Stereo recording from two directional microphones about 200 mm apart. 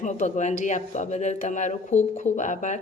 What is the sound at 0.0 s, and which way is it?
Speech, 35° left (ahead or behind).